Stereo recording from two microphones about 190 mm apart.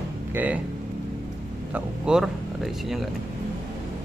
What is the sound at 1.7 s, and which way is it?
Speech, 5° right (ahead or behind).